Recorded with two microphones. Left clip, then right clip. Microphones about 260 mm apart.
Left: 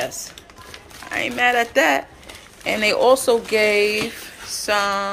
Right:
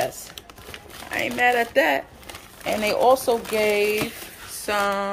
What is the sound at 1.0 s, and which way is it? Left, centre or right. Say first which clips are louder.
Speech: left 2 dB; centre.